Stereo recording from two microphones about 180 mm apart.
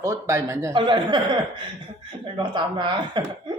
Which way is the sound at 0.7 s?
25° right (ahead or behind).